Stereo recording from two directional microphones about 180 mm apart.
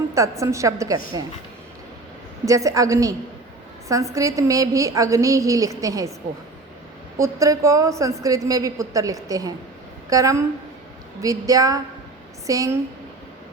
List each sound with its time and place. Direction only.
0.1 s a woman's voice: 15° right (ahead or behind)
2.4 s a woman's voice: 20° right (ahead or behind)
7.2 s a woman's voice: 15° right (ahead or behind)